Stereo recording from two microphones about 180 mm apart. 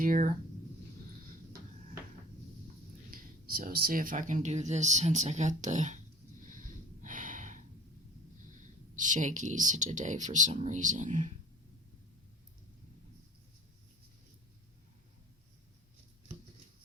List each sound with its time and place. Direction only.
0.0 s speech: 50° right (ahead or behind)
3.1 s speech: 55° right (ahead or behind)
6.4 s snort: 45° right (ahead or behind)
8.4 s speech: 45° right (ahead or behind)